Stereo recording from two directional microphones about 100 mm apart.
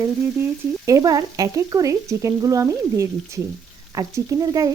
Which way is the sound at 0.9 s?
35° right (ahead or behind).